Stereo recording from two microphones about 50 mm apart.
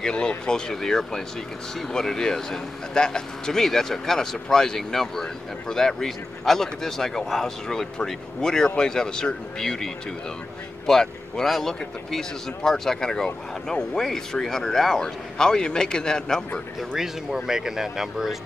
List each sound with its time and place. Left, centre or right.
0.0 s speech: centre
0.7 s speech: centre
10.9 s speech: centre
16.9 s speech: centre